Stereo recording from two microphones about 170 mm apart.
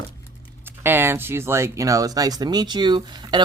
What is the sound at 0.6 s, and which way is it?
Speech, 15° right (ahead or behind).